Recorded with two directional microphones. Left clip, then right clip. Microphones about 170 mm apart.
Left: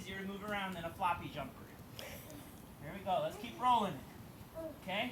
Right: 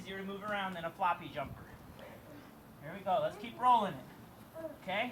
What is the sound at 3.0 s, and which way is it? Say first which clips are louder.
Speech: right 3 dB; 10° right (ahead or behind).